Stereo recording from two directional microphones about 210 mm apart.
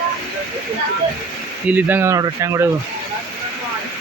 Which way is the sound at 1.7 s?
10° right (ahead or behind).